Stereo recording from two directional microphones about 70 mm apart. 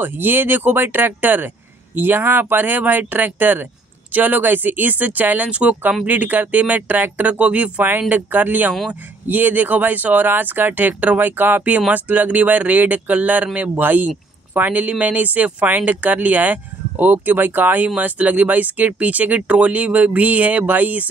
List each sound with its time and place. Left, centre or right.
0.0 s speech: right